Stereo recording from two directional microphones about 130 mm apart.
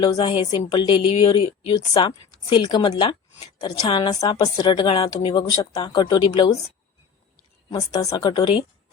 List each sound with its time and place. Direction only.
0.3 s speech: 40° left (ahead or behind)
7.7 s speech: 30° left (ahead or behind)